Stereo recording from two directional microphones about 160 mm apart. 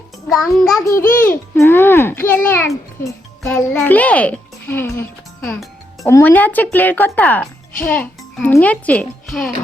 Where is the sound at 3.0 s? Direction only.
20° left (ahead or behind).